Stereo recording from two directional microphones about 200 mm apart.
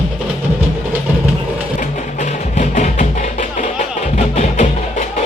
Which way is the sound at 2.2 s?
35° left (ahead or behind).